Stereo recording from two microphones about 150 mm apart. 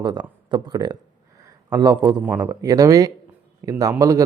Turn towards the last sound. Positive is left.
turn(degrees=-20)  # may be behind; listen again after turning